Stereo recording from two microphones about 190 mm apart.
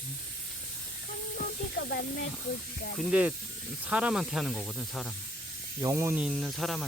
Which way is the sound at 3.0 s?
5° right (ahead or behind).